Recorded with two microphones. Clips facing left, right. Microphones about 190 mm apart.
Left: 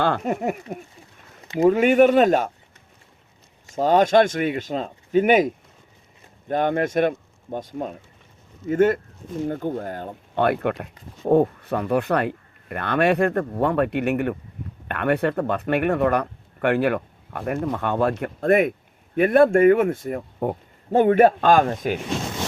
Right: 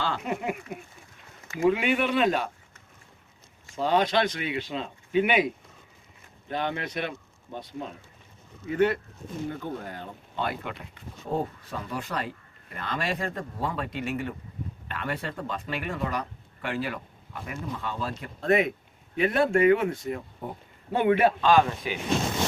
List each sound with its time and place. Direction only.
0.0 s speech: 50° left (ahead or behind)
3.7 s speech: 45° left (ahead or behind)
6.5 s speech: 50° left (ahead or behind)